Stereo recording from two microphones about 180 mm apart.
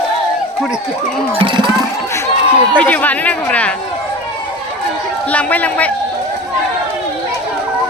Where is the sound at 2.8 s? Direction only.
10° left (ahead or behind).